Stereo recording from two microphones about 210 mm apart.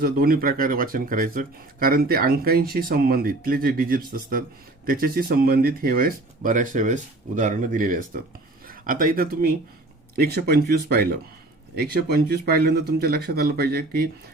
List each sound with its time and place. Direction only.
0.0 s speech: 45° right (ahead or behind)